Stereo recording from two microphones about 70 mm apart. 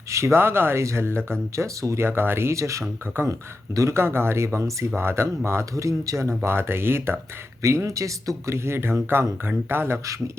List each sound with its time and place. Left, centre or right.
0.1 s speech: right
2.0 s speech: right
3.2 s speech: right
3.8 s speech: right
4.0 s speech: right
5.7 s speech: right
7.6 s speech: right